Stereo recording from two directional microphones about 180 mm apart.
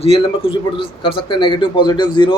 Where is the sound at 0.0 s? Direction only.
30° left (ahead or behind).